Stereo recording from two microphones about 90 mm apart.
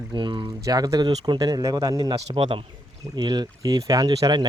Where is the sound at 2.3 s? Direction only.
75° right (ahead or behind).